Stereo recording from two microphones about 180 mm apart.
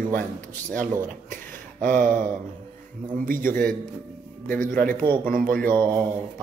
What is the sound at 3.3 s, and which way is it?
Speech, 50° right (ahead or behind).